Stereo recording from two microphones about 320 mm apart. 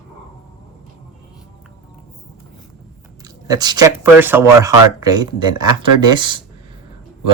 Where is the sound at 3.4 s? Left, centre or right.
Centre.